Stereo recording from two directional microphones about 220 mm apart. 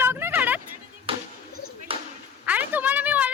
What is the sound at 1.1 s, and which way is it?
Chop, 25° right (ahead or behind).